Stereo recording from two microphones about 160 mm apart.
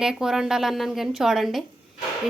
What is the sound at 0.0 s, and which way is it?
A woman's voice, 5° right (ahead or behind).